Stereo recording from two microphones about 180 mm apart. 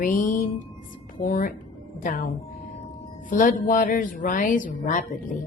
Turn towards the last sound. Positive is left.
turn(degrees=50)  # may be behind; listen again after turning